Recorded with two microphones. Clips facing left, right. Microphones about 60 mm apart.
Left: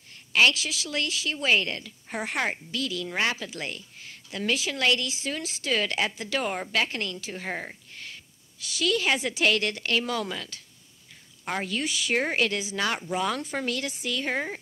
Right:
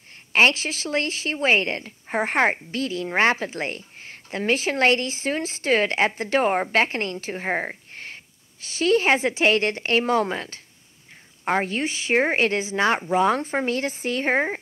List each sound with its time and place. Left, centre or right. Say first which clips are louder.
0.3 s a woman's voice: right 3 dB; right